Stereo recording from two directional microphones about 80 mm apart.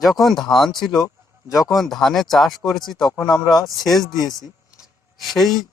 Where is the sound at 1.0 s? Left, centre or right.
Left.